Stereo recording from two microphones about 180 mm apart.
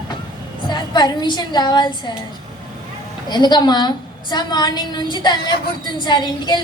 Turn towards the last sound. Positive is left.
turn(degrees=25)  # may be behind; listen again after turning